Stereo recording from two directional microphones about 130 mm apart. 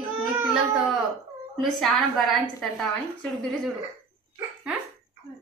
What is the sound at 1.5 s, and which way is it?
A woman's voice, centre (ahead or behind).